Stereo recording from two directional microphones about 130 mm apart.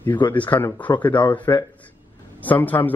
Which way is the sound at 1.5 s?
25° left (ahead or behind).